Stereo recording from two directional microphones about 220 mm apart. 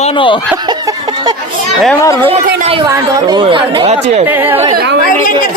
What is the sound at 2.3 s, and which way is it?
Speech, 30° right (ahead or behind).